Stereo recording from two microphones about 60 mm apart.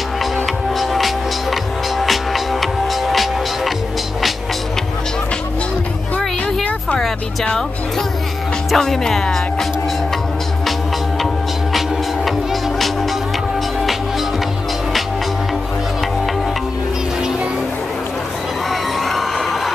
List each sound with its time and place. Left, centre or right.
0.7 s music: centre
6.1 s music: centre
8.7 s speech: centre
12.3 s music: centre
18.7 s crowd: centre